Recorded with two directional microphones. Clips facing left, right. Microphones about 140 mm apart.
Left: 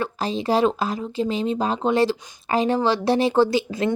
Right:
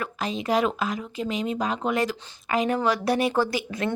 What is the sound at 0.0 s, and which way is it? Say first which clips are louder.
Speech: left 4 dB; 30° left (ahead or behind).